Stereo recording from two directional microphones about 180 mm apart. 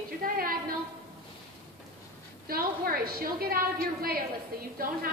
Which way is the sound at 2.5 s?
55° right (ahead or behind).